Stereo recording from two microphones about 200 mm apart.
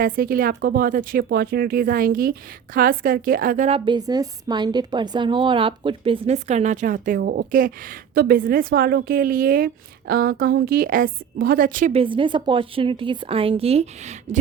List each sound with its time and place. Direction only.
0.0 s a woman's voice: 45° right (ahead or behind)
3.7 s a woman's voice: 25° right (ahead or behind); by 11.9 s 45° right (ahead or behind)
11.9 s a woman's voice: 25° right (ahead or behind)